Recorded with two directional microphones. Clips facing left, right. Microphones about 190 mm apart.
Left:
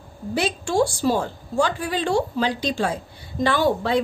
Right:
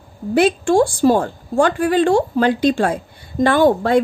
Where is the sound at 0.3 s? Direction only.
55° right (ahead or behind).